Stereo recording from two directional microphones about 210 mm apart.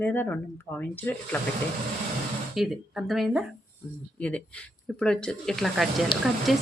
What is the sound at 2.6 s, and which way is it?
A woman's voice, centre (ahead or behind).